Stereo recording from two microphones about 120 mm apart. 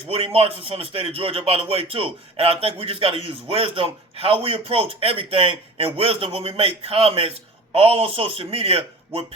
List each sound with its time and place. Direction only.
0.3 s a man's voice: 55° right (ahead or behind)